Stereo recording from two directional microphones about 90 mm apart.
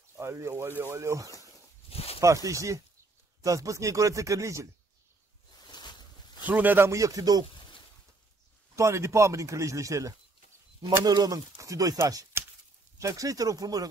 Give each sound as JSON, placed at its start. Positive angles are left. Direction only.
{"t": 0.1, "sound": "a man's voice", "side_deg": -30}
{"t": 1.9, "sound": "a sound", "side_deg": 90}
{"t": 2.1, "sound": "a man's voice", "side_deg": -40}
{"t": 5.7, "sound": "a sound", "side_deg": 55}
{"t": 6.4, "sound": "a man's voice", "side_deg": -20}
{"t": 6.9, "sound": "a man's voice", "side_deg": -40}
{"t": 8.7, "sound": "a man's voice", "side_deg": -35}